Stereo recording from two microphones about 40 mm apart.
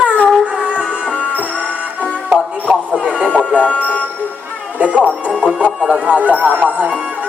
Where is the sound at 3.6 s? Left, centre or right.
Left.